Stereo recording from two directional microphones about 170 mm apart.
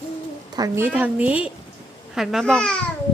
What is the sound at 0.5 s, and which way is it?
Speech, 20° right (ahead or behind).